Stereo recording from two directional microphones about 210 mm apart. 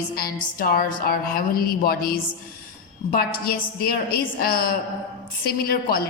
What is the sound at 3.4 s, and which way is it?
A woman's voice, 45° left (ahead or behind).